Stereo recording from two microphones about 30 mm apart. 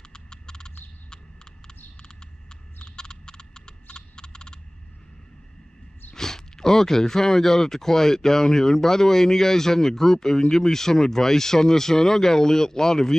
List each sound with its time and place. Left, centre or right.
0.1 s frog: left
2.8 s frog: left
3.8 s typing: left
6.1 s speech: centre